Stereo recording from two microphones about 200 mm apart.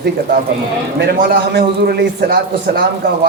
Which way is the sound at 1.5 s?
55° right (ahead or behind).